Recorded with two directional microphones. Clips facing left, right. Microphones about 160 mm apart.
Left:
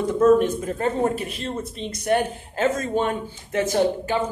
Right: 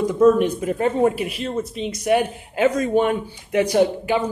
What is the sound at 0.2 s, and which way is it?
Speech, 15° right (ahead or behind).